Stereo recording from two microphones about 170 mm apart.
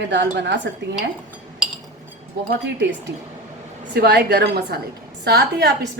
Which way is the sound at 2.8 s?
90° right.